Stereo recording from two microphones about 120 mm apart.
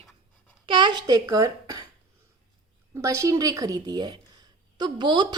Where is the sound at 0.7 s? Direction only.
40° right (ahead or behind).